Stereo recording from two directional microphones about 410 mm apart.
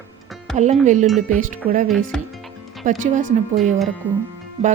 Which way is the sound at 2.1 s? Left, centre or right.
Centre.